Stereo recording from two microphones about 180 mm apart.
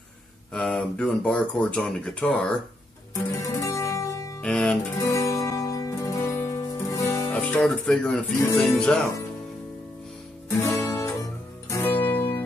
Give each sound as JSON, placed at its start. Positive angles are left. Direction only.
{"t": 0.5, "sound": "speech", "side_deg": 5}
{"t": 3.3, "sound": "music", "side_deg": 15}
{"t": 4.4, "sound": "music", "side_deg": 5}
{"t": 4.9, "sound": "music", "side_deg": 15}
{"t": 7.3, "sound": "speech", "side_deg": 5}
{"t": 10.5, "sound": "music", "side_deg": 15}